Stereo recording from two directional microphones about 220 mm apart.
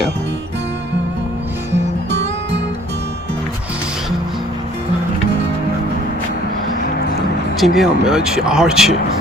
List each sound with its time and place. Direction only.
2.0 s music: 55° right (ahead or behind)
7.6 s speech: centre (ahead or behind)